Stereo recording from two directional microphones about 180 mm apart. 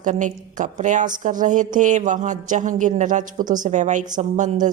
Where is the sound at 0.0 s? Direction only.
45° right (ahead or behind).